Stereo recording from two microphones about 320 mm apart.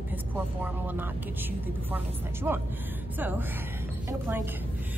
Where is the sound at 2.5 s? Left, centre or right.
Centre.